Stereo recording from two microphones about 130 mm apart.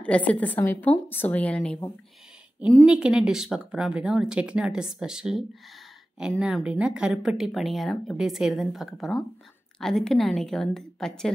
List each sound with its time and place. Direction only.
0.0 s a woman's voice: 10° left (ahead or behind)
2.8 s speech: 5° right (ahead or behind)
6.4 s speech: 5° right (ahead or behind)